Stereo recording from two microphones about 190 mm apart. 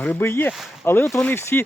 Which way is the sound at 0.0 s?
10° left (ahead or behind).